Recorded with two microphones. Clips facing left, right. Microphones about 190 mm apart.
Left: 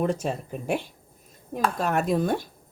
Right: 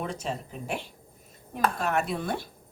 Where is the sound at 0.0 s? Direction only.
50° left (ahead or behind).